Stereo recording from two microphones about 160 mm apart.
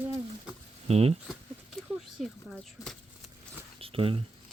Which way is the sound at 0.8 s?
40° right (ahead or behind).